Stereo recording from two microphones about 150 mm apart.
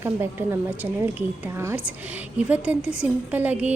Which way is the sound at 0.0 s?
15° right (ahead or behind).